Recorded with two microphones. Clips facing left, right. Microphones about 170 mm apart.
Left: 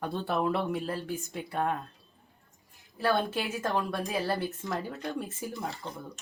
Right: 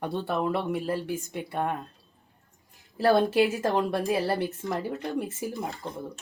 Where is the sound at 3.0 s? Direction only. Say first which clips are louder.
Right 7 dB; 35° right (ahead or behind).